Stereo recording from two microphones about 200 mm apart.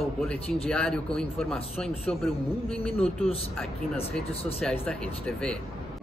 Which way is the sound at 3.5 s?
Centre (ahead or behind).